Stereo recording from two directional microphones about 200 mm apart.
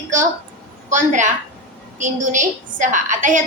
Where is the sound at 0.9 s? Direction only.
40° right (ahead or behind).